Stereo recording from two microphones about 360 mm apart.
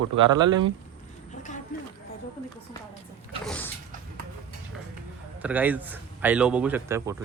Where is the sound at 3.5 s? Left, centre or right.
Centre.